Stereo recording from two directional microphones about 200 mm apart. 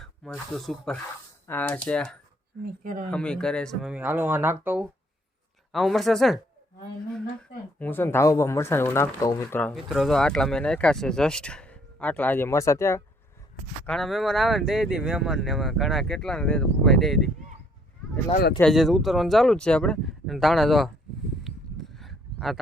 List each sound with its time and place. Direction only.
0.5 s speech: centre (ahead or behind)
2.8 s speech: 45° right (ahead or behind)
3.1 s speech: 5° left (ahead or behind)
7.8 s speech: 10° left (ahead or behind)
9.7 s speech: centre (ahead or behind)
13.8 s speech: centre (ahead or behind)
18.6 s speech: centre (ahead or behind)
21.4 s a sound: centre (ahead or behind)